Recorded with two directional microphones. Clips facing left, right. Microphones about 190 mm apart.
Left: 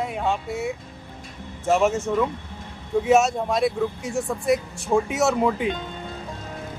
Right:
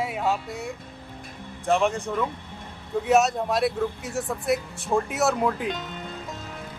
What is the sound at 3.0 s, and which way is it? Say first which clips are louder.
A man's voice: left 1 dB; centre (ahead or behind).